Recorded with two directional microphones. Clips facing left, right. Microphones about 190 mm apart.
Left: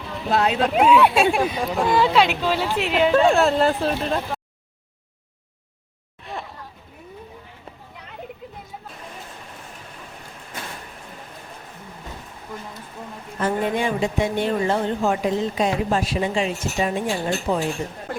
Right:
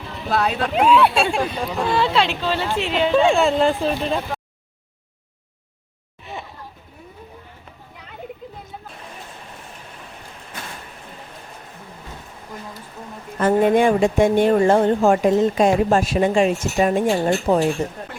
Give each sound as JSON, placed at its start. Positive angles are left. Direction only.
{"t": 0.3, "sound": "speech", "side_deg": 20}
{"t": 0.7, "sound": "speech", "side_deg": 5}
{"t": 13.4, "sound": "speech", "side_deg": -50}